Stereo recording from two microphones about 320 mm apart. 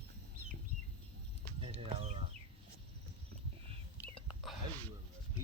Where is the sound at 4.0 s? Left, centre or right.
Centre.